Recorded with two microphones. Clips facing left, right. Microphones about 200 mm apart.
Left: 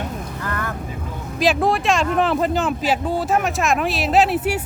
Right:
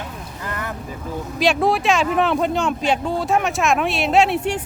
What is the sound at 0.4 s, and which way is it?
Vehicle, 20° right (ahead or behind).